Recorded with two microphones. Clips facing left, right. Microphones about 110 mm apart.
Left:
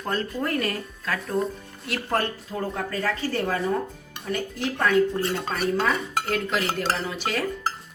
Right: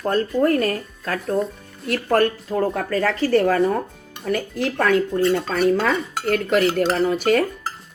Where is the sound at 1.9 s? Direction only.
60° right (ahead or behind); by 3.1 s 90° right.